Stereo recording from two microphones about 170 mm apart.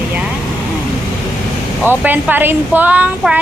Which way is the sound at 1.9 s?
10° right (ahead or behind).